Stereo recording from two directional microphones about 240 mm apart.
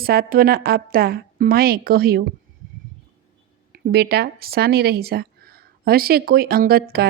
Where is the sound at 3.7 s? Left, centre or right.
Right.